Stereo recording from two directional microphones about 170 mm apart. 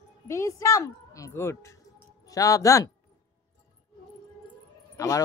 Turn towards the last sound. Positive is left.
turn(degrees=20)  # may be behind; listen again after turning